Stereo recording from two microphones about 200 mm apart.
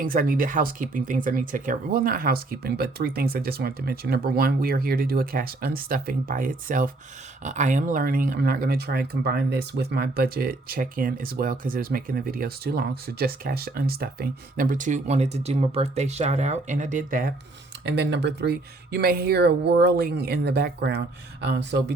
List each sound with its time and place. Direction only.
0.0 s speech: 45° right (ahead or behind)
17.8 s speech: 55° right (ahead or behind)